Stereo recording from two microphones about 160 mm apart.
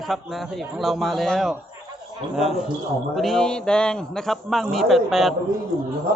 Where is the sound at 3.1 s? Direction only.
Centre (ahead or behind).